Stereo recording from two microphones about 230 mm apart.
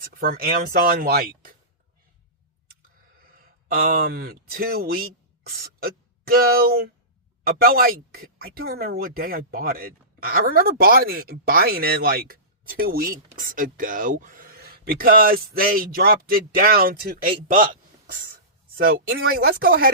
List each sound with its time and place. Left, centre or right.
0.0 s speech: right
3.2 s speech: right